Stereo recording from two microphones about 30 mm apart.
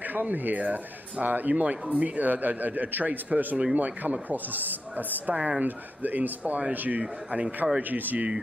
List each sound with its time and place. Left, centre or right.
0.0 s speech: right
1.5 s speech: right
5.2 s a man's voice: right
5.6 s speech: right
6.7 s speech: right
7.0 s a man's voice: right
7.9 s speech: right